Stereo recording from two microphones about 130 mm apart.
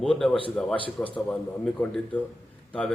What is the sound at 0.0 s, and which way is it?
A man's voice, 5° left (ahead or behind).